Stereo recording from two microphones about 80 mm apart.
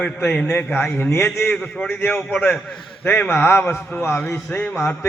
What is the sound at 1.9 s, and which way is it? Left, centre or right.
Speech, left.